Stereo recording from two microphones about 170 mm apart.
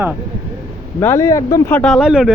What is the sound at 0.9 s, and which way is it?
Speech, 15° left (ahead or behind).